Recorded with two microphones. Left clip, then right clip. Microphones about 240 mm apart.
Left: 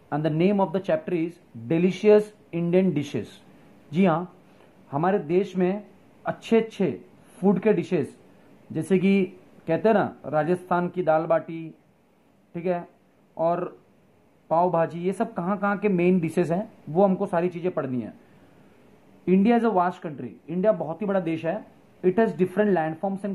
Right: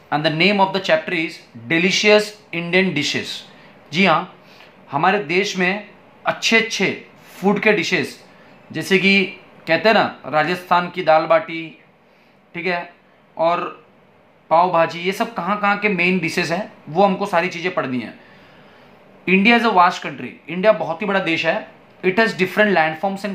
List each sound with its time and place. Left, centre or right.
0.1 s speech: centre
19.2 s speech: centre